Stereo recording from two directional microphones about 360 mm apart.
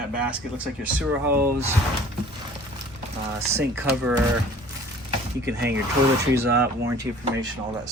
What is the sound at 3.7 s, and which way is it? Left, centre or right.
Speech, centre.